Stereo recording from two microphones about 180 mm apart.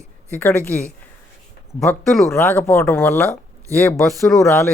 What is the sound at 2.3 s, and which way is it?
Speech, 15° left (ahead or behind).